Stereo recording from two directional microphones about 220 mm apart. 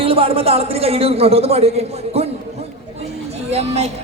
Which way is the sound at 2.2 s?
25° right (ahead or behind).